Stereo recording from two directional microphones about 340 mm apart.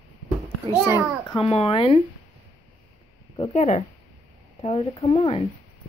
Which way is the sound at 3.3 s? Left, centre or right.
Centre.